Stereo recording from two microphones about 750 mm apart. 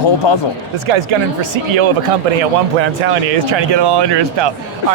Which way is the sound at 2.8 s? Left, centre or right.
Right.